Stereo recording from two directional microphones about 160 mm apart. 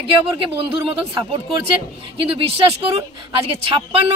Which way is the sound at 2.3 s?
35° right (ahead or behind).